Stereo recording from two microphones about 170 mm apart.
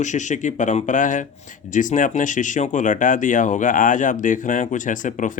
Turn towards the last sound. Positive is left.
turn(degrees=50)  # may be behind; listen again after turning